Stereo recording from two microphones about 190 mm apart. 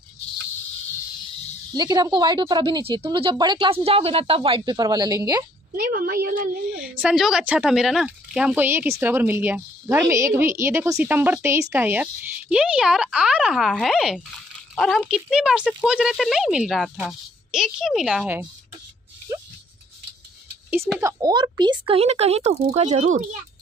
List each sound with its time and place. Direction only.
1.7 s a woman's voice: 20° right (ahead or behind)
5.8 s a woman's voice: 50° right (ahead or behind)
6.8 s a woman's voice: 5° right (ahead or behind)
19.3 s a sound: 15° right (ahead or behind)
21.0 s a woman's voice: 20° right (ahead or behind); by 23.2 s 40° right (ahead or behind)